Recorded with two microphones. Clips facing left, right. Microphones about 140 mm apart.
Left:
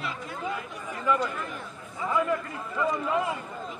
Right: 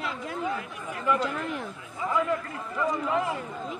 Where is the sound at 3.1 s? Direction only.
20° left (ahead or behind).